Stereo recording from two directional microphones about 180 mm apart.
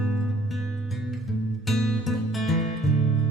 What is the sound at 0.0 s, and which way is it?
Music, centre (ahead or behind).